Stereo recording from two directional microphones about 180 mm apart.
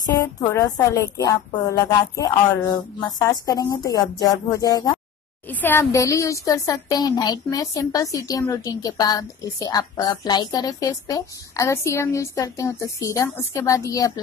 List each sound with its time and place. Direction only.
0.0 s a woman's voice: 20° left (ahead or behind)